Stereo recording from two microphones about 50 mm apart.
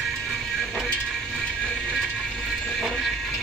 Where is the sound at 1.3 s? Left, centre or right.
Centre.